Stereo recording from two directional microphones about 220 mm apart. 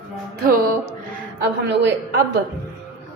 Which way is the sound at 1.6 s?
50° right (ahead or behind).